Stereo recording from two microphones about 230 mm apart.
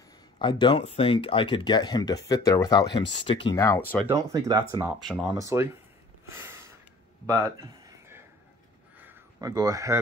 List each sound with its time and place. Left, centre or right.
0.4 s speech: centre
4.1 s speech: centre
5.0 s speech: centre
6.2 s a sound: centre